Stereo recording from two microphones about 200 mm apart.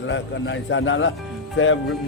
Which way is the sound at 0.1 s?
65° left (ahead or behind).